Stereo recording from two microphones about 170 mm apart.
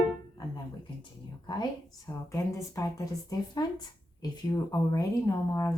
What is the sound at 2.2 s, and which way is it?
Speech, 20° left (ahead or behind).